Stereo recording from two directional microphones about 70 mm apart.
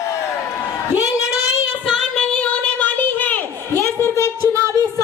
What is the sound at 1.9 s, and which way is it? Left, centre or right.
Music, centre.